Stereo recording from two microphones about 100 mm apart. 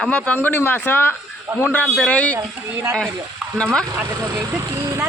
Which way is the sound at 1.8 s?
10° left (ahead or behind).